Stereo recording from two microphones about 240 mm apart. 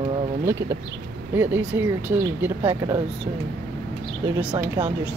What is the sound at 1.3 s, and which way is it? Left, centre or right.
Speech, centre.